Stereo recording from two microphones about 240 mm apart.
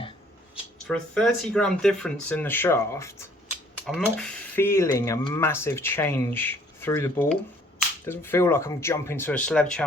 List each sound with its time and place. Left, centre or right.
0.9 s speech: centre